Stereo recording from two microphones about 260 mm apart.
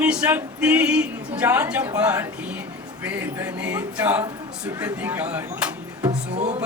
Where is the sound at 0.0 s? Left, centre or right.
Centre.